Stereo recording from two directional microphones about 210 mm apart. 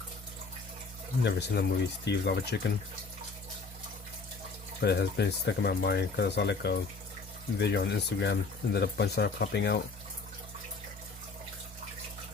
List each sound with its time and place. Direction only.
1.2 s speech: 50° left (ahead or behind)
4.8 s speech: 50° left (ahead or behind)